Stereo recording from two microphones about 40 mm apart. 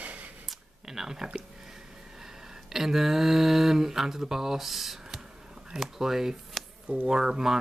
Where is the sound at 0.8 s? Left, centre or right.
Centre.